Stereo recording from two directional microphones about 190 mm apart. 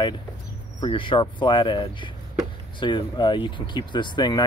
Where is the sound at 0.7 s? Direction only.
25° left (ahead or behind).